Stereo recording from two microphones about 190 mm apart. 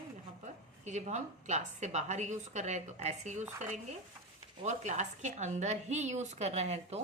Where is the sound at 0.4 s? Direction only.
40° right (ahead or behind).